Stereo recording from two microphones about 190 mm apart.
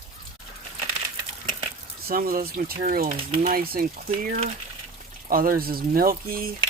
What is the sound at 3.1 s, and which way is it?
Speech, 35° right (ahead or behind).